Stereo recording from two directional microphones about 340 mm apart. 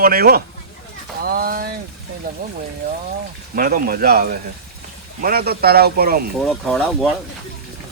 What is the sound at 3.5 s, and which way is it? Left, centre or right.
A man's voice, right.